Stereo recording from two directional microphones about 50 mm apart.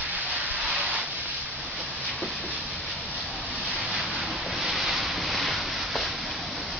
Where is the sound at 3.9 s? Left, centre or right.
Right.